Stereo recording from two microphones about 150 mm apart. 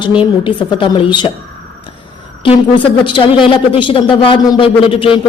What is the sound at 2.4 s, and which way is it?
Speech, 35° left (ahead or behind).